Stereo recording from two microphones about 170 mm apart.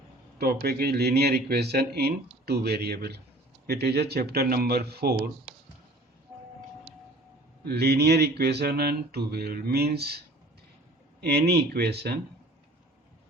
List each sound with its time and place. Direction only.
0.3 s speech: 65° right (ahead or behind)
7.6 s speech: 70° right (ahead or behind)
11.2 s speech: 70° right (ahead or behind)